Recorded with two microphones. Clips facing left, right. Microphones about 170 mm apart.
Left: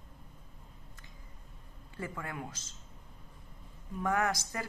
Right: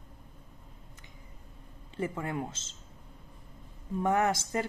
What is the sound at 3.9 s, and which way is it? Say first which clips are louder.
Speech: right 4 dB; 25° right (ahead or behind).